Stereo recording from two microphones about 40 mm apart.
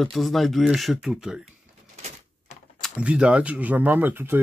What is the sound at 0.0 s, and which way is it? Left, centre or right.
Speech, centre.